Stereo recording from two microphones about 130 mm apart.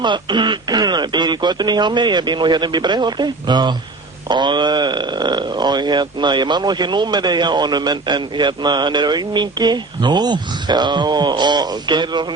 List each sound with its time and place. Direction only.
0.0 s speech: 35° right (ahead or behind)